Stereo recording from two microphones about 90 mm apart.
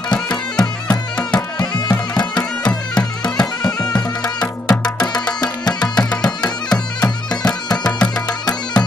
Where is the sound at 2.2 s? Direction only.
50° left (ahead or behind).